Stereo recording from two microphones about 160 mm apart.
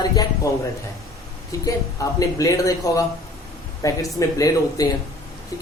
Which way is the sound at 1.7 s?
20° left (ahead or behind).